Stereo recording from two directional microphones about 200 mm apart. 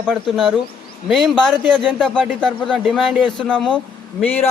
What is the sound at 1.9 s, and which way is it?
A man's voice, 5° left (ahead or behind).